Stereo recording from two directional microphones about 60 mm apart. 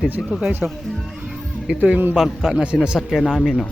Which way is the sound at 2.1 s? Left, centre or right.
Centre.